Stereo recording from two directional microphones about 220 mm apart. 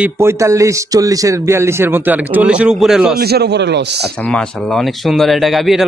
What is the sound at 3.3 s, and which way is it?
Speech, 50° right (ahead or behind).